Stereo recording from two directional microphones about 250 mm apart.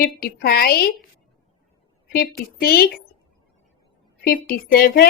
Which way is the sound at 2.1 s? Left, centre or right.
Left.